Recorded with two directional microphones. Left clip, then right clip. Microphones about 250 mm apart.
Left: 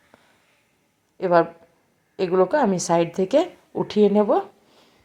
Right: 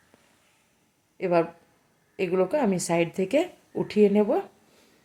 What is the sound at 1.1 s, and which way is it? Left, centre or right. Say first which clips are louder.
Speech: left 6 dB; centre.